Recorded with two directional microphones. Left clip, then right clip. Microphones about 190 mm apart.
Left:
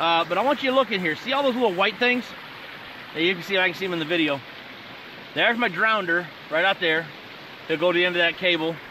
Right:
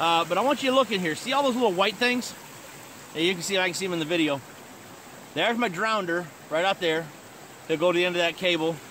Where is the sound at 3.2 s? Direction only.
10° right (ahead or behind).